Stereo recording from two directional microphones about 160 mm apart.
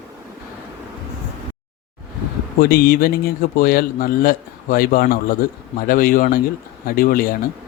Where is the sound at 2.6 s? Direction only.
70° left (ahead or behind).